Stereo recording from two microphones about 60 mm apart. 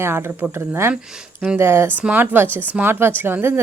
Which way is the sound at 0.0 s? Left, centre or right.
Right.